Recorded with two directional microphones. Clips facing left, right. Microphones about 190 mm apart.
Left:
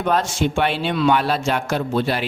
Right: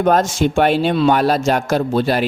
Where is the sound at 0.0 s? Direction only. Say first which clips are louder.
Right 5 dB; 45° right (ahead or behind).